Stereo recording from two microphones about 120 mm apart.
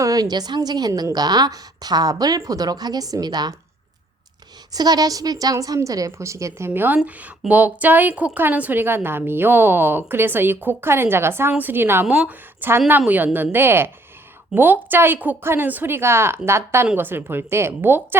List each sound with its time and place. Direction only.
0.0 s a woman's voice: 30° right (ahead or behind)
4.7 s a woman's voice: 35° right (ahead or behind)
12.0 s a woman's voice: 5° right (ahead or behind)